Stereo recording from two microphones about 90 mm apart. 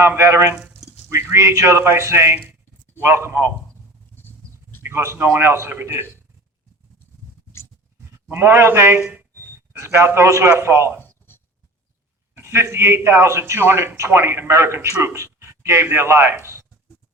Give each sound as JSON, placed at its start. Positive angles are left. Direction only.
{"t": 0.0, "sound": "a man's voice", "side_deg": -25}
{"t": 4.8, "sound": "a man's voice", "side_deg": -30}
{"t": 8.3, "sound": "a man's voice", "side_deg": -25}
{"t": 12.4, "sound": "a man's voice", "side_deg": -30}